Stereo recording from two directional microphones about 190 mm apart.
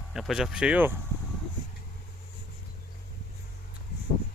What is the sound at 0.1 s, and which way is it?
Speech, centre (ahead or behind).